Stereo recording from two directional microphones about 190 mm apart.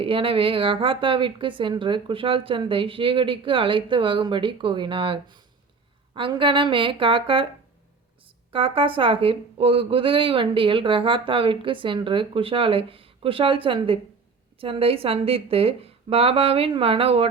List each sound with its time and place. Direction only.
0.0 s speech: 30° right (ahead or behind)
8.5 s speech: 30° right (ahead or behind)